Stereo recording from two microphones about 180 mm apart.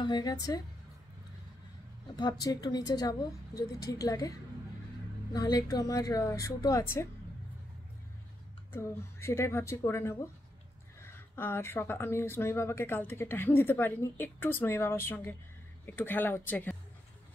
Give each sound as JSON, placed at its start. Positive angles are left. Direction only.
{"t": 0.0, "sound": "a woman's voice", "side_deg": 25}
{"t": 2.1, "sound": "a woman's voice", "side_deg": 20}
{"t": 5.3, "sound": "a woman's voice", "side_deg": 20}
{"t": 8.7, "sound": "speech", "side_deg": 15}